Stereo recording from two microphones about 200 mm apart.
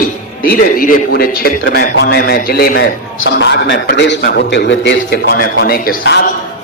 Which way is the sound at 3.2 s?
65° left (ahead or behind).